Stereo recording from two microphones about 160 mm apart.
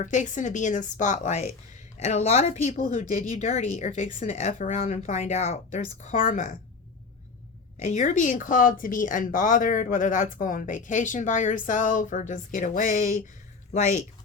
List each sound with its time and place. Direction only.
0.0 s speech: 50° left (ahead or behind)
7.9 s speech: 50° left (ahead or behind)